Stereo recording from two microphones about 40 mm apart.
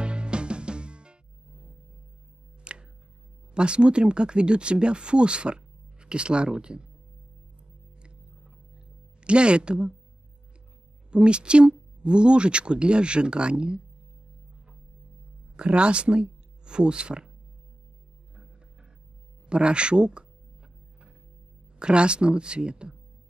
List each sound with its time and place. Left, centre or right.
0.0 s music: right
2.6 s music: right
3.5 s speech: right
9.2 s speech: right
11.1 s speech: right
15.5 s speech: right
19.4 s speech: right
21.7 s speech: right